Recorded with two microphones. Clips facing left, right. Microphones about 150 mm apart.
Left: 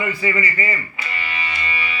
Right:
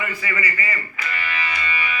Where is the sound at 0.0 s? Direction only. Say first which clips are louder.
Left 5 dB; 25° left (ahead or behind).